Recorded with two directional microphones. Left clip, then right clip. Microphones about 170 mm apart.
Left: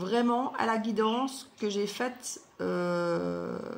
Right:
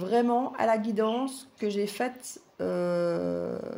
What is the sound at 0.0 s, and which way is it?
Speech, 40° right (ahead or behind).